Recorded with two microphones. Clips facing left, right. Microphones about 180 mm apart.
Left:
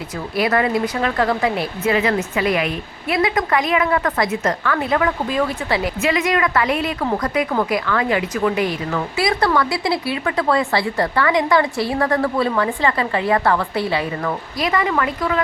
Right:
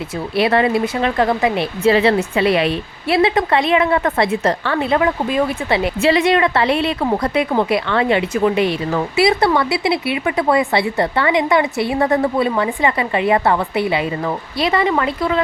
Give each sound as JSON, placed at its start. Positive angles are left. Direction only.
{"t": 0.3, "sound": "speech", "side_deg": -25}